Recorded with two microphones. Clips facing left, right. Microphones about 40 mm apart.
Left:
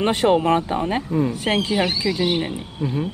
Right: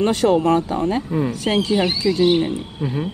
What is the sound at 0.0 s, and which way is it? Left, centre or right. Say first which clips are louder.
Speech: right 1 dB; left.